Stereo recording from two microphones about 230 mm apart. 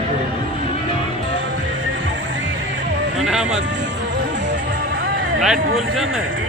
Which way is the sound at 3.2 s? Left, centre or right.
Centre.